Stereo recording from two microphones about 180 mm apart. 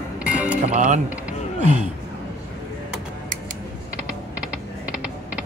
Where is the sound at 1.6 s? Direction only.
40° right (ahead or behind).